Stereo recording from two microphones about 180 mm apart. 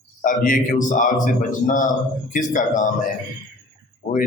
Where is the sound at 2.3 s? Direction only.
45° left (ahead or behind).